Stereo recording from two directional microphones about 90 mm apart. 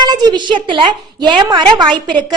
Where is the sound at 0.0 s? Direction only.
50° right (ahead or behind).